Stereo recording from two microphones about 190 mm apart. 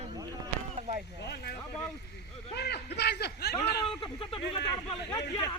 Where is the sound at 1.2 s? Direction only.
60° left (ahead or behind).